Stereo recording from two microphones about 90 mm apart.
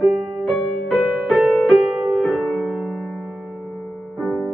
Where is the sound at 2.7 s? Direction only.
10° right (ahead or behind).